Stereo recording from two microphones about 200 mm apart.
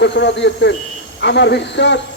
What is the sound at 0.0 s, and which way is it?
A man's voice, 60° left (ahead or behind).